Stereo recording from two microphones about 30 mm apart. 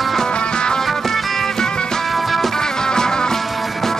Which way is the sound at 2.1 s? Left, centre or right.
Centre.